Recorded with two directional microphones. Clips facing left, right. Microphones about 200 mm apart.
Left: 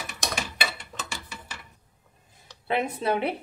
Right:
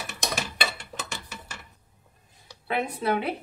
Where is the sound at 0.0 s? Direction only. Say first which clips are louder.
Right 1 dB; centre (ahead or behind).